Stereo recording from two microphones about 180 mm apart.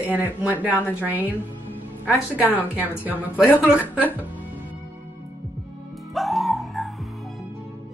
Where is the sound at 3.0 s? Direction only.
10° right (ahead or behind).